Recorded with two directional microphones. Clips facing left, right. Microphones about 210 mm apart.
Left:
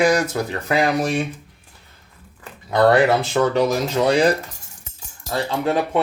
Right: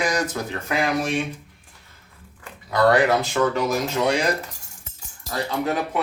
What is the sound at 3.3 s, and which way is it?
Speech, 35° left (ahead or behind).